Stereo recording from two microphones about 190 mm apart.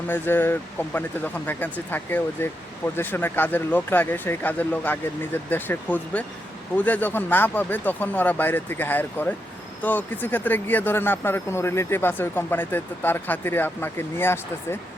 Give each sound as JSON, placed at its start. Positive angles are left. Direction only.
{"t": 0.1, "sound": "speech", "side_deg": 10}